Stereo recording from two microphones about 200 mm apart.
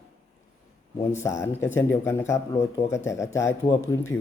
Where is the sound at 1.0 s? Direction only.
15° left (ahead or behind).